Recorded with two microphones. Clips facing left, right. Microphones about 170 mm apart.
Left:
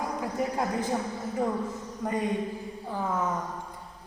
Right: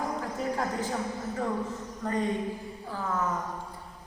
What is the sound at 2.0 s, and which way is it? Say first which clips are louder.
Speech: even; 10° left (ahead or behind).